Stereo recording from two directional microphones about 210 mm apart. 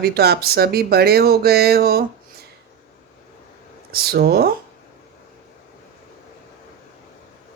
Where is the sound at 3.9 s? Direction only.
45° right (ahead or behind).